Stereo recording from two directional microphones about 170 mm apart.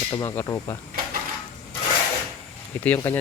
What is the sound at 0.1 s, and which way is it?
Speech, 15° left (ahead or behind).